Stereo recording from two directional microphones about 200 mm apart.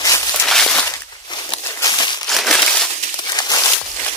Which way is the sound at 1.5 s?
15° left (ahead or behind).